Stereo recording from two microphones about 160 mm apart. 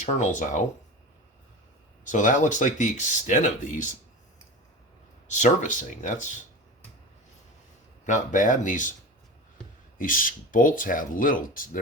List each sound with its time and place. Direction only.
0.0 s speech: 50° left (ahead or behind)
2.0 s speech: 50° left (ahead or behind)
5.3 s speech: 50° left (ahead or behind)
8.0 s speech: 50° left (ahead or behind)
10.0 s speech: 60° left (ahead or behind)